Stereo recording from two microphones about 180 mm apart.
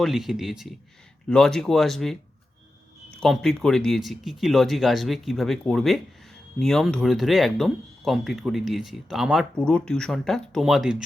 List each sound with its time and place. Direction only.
0.0 s speech: centre (ahead or behind)
3.2 s speech: centre (ahead or behind)